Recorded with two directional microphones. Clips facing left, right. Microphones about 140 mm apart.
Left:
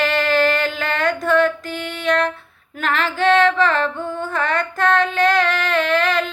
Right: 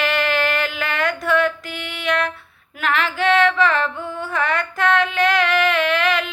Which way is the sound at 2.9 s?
45° left (ahead or behind).